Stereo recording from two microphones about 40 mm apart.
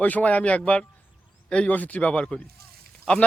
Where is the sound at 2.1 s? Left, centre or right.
Left.